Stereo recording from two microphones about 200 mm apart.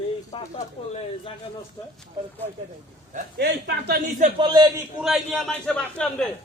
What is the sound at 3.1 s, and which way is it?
Speech, 50° right (ahead or behind).